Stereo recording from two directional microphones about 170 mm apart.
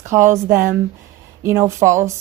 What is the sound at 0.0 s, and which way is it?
A woman's voice, 15° right (ahead or behind).